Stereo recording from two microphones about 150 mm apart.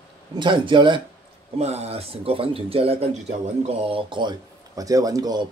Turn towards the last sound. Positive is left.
turn(degrees=-25)  # may be behind; listen again after turning